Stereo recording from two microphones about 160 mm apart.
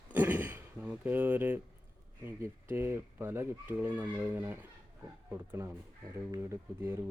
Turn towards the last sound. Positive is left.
turn(degrees=-15)  # may be behind; listen again after turning